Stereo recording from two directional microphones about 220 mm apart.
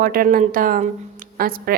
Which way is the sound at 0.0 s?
40° right (ahead or behind).